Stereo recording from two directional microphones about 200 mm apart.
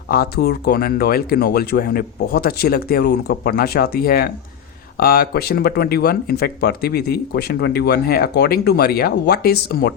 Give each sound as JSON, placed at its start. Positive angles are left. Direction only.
{"t": 0.1, "sound": "speech", "side_deg": 50}